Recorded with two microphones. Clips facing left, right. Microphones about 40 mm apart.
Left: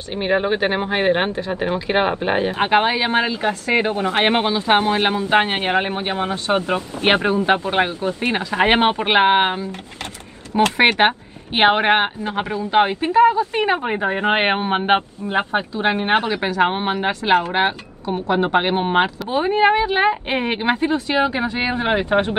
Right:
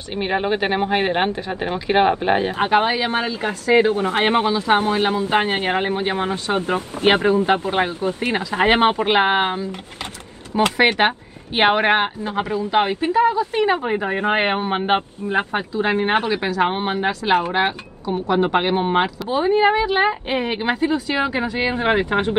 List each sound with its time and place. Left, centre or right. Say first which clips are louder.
0.1 s speech: left 2 dB; centre
0.7 s speech: left 1 dB; left
2.0 s speech: right 4 dB; centre
2.5 s speech: left 1 dB; left
10.8 s a woman's voice: left 1 dB; left
12.2 s speech: right 1 dB; left
18.6 s speech: left 1 dB; left
21.2 s speech: left 1 dB; centre
21.7 s speech: left 1 dB; left